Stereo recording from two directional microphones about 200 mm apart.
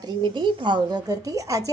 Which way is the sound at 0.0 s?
25° right (ahead or behind).